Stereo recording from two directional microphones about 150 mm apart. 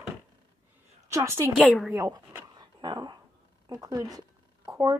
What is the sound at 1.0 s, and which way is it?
Speech, 20° right (ahead or behind).